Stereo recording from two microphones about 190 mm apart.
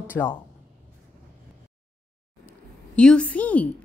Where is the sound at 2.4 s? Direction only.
5° left (ahead or behind).